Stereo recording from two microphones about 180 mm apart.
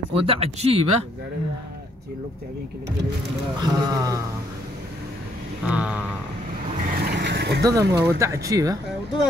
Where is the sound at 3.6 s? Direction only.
20° right (ahead or behind).